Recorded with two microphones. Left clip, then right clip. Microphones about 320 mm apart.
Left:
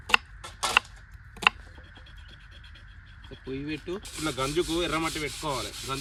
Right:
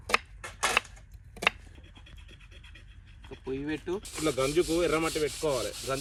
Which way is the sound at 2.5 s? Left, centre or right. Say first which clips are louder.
Left 2 dB; left.